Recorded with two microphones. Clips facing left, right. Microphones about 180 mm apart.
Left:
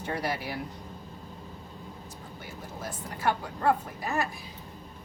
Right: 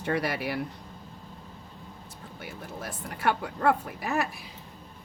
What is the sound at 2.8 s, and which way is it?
Speech, 65° right (ahead or behind).